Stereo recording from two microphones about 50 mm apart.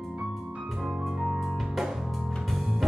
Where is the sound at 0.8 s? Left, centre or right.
Centre.